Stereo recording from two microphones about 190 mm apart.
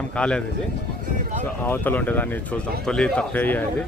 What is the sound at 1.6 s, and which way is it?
Speech, 10° left (ahead or behind).